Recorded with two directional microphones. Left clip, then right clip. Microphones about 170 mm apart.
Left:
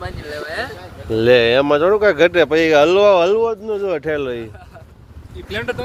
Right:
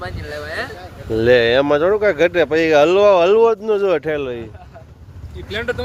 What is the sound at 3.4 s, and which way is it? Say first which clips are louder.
Speech: right 5 dB; 40° right (ahead or behind).